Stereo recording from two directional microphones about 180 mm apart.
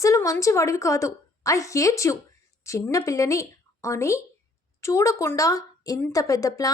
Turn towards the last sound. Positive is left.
turn(degrees=20)  # may be behind; listen again after turning